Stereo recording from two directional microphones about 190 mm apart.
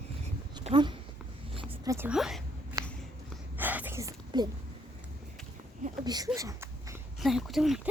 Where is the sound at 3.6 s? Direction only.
10° right (ahead or behind).